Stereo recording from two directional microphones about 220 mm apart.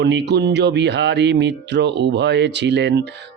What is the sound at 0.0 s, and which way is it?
Speech, 50° right (ahead or behind).